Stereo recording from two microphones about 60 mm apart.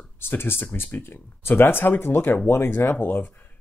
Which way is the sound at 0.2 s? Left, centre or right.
Left.